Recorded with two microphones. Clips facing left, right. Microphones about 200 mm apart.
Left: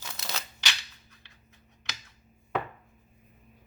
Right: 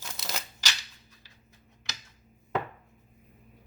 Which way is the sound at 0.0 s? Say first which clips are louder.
Even; 15° right (ahead or behind).